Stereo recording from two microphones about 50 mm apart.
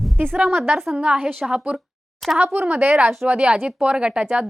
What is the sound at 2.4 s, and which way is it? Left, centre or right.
Speech, right.